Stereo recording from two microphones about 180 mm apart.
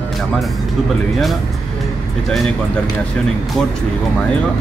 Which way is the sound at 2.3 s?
Centre (ahead or behind).